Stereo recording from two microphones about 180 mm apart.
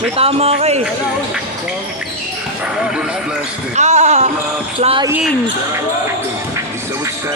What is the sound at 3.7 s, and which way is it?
Speech, 40° right (ahead or behind).